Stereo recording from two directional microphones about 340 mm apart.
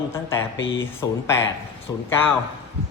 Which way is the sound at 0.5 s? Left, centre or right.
Left.